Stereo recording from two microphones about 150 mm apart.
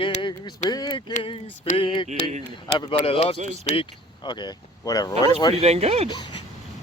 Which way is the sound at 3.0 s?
40° left (ahead or behind).